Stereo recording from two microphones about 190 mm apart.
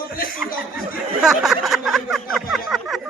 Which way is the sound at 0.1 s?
50° left (ahead or behind).